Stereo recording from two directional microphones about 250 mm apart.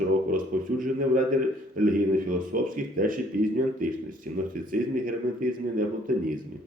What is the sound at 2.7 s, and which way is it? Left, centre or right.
Speech, right.